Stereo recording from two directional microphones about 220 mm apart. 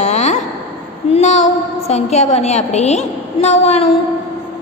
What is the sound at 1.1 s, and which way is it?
A woman's voice, 30° left (ahead or behind).